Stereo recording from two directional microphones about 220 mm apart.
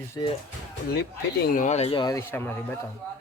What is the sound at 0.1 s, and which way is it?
Speech, 20° left (ahead or behind).